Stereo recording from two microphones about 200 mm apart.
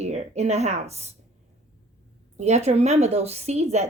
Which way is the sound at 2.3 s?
35° right (ahead or behind).